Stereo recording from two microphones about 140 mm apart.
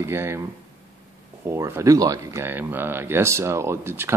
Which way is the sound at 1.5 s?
20° right (ahead or behind).